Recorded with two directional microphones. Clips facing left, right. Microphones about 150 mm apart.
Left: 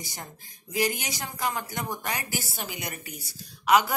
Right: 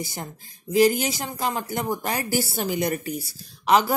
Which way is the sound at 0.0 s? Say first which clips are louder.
Right 8 dB; 25° right (ahead or behind).